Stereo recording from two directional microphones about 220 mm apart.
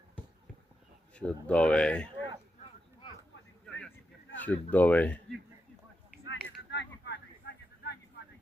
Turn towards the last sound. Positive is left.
turn(degrees=50)  # may be behind; listen again after turning